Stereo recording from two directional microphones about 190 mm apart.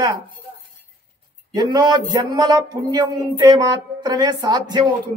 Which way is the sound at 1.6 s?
20° right (ahead or behind).